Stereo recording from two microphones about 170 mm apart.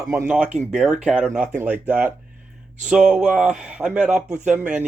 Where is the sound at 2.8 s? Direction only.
5° right (ahead or behind).